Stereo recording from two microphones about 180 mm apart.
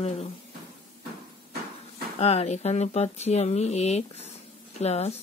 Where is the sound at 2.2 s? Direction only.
35° left (ahead or behind).